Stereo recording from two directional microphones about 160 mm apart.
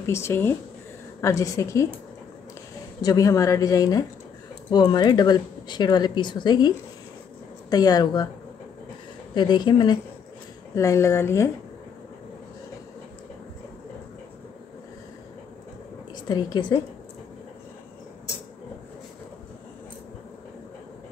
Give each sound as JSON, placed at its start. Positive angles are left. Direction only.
{"t": 0.0, "sound": "speech", "side_deg": 15}
{"t": 3.0, "sound": "speech", "side_deg": 20}
{"t": 7.7, "sound": "speech", "side_deg": 25}
{"t": 9.3, "sound": "speech", "side_deg": 30}
{"t": 16.1, "sound": "a woman's voice", "side_deg": 25}